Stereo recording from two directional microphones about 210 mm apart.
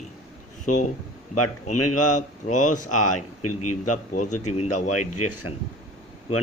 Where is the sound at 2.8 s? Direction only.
90° left.